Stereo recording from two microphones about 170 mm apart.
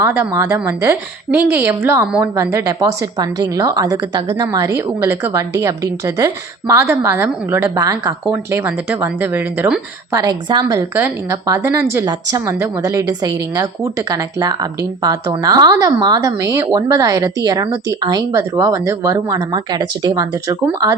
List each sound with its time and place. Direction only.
0.0 s a woman's voice: 10° right (ahead or behind)
10.1 s a woman's voice: 20° right (ahead or behind)